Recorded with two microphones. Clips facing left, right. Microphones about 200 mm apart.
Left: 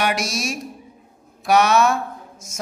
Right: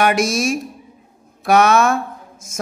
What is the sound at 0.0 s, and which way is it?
Speech, 50° right (ahead or behind).